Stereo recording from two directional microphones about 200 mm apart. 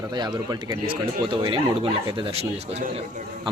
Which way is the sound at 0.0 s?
20° right (ahead or behind).